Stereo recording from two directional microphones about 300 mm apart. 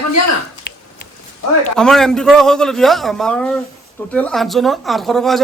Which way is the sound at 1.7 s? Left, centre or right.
Centre.